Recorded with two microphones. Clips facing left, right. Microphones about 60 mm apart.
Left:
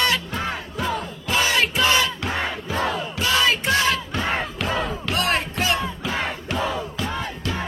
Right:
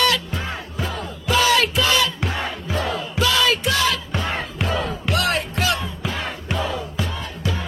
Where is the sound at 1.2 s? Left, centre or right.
Left.